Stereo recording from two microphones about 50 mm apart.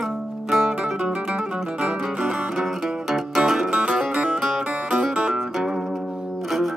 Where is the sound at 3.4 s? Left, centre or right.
Centre.